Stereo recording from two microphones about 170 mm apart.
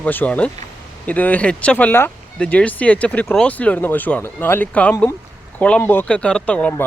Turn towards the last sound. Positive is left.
turn(degrees=5)  # may be behind; listen again after turning